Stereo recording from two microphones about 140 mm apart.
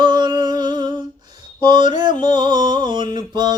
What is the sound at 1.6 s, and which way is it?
Mantra, 35° right (ahead or behind).